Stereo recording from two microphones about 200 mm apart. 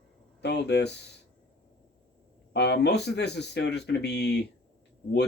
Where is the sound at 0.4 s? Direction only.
55° left (ahead or behind).